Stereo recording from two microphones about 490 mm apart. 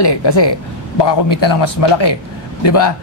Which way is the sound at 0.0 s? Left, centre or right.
Left.